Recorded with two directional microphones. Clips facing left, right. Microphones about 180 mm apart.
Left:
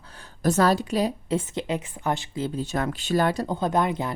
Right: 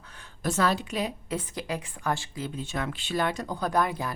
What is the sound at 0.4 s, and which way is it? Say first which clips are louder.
A woman's voice: left 5 dB; 40° left (ahead or behind).